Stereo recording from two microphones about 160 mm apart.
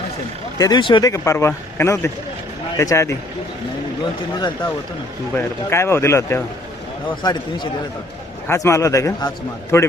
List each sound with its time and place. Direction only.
0.6 s speech: 25° left (ahead or behind)
5.4 s speech: 15° left (ahead or behind)
7.2 s speech: 25° left (ahead or behind)